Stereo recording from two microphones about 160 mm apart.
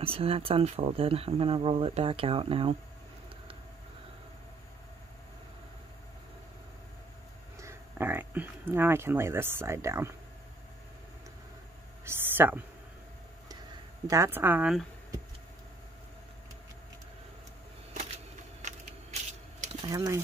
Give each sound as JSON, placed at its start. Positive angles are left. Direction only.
{"t": 0.0, "sound": "speech", "side_deg": -35}
{"t": 7.5, "sound": "speech", "side_deg": -15}
{"t": 12.0, "sound": "a sound", "side_deg": -15}
{"t": 14.0, "sound": "a woman's voice", "side_deg": -15}
{"t": 18.1, "sound": "a sound", "side_deg": -45}
{"t": 19.9, "sound": "speech", "side_deg": -20}